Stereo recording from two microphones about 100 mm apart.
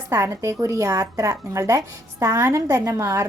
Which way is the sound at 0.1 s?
30° right (ahead or behind).